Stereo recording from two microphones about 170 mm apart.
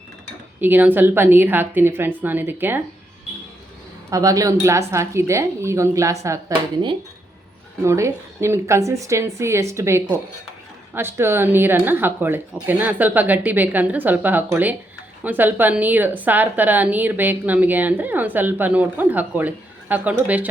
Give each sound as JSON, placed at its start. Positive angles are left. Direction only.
{"t": 0.6, "sound": "a woman's voice", "side_deg": -10}
{"t": 4.1, "sound": "a woman's voice", "side_deg": -20}
{"t": 7.9, "sound": "a woman's voice", "side_deg": -15}